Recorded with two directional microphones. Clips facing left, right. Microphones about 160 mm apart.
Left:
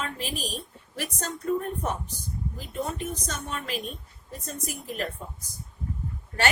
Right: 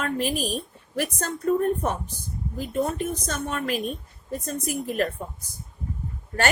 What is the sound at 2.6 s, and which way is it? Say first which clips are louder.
A woman's voice: right 7 dB; 50° right (ahead or behind).